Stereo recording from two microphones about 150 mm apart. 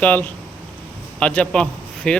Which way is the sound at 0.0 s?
10° left (ahead or behind).